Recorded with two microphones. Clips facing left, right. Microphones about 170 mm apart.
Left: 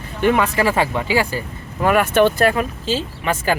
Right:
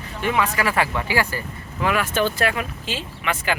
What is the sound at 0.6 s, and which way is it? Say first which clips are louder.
Speech: left 4 dB; 25° left (ahead or behind).